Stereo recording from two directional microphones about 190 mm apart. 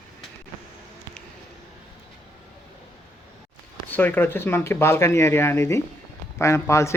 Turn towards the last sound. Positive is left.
turn(degrees=15)  # may be behind; listen again after turning